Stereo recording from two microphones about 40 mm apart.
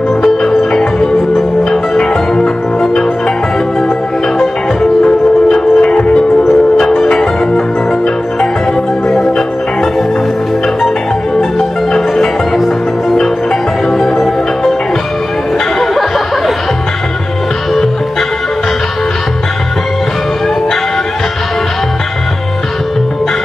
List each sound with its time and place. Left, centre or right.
0.2 s music: centre
5.0 s music: left
13.9 s music: centre
15.8 s a sound: centre